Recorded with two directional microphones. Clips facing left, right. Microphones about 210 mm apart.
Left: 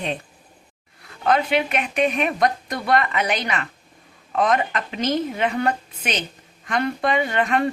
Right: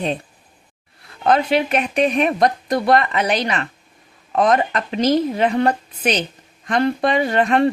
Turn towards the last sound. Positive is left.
turn(degrees=-35)  # may be behind; listen again after turning